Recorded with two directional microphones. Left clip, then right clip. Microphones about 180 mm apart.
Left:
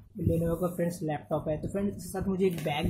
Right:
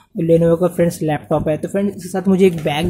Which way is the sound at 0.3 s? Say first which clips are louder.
Right 17 dB; 40° right (ahead or behind).